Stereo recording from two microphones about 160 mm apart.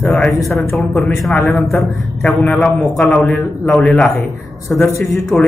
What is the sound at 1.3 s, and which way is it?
A man's voice, 15° left (ahead or behind).